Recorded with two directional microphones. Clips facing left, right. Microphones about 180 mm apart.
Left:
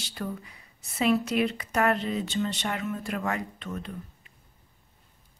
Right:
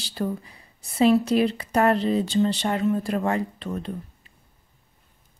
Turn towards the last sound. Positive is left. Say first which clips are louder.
# right 6 dB
turn(degrees=-35)  # may be behind; listen again after turning